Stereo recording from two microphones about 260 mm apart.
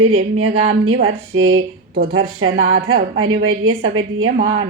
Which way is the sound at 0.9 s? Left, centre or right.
Right.